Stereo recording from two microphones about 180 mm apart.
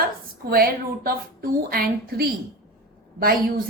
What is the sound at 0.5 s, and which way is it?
A woman's voice, 55° right (ahead or behind).